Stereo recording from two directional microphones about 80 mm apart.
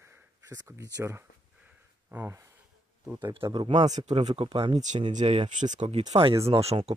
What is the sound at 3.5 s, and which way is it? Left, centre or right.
Speech, right.